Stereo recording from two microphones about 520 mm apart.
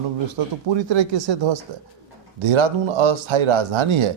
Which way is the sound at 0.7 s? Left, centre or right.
Right.